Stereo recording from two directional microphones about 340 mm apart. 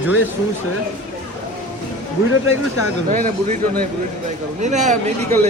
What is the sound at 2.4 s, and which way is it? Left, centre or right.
Speech, left.